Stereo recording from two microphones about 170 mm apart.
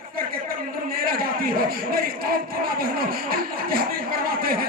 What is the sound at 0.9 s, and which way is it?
Speech, 60° right (ahead or behind).